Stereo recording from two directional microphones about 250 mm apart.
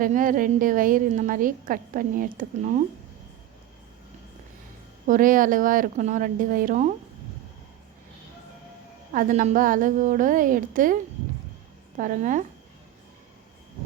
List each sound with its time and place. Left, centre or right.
0.0 s a woman's voice: right
5.0 s a woman's voice: right
9.1 s a woman's voice: right
11.9 s a woman's voice: right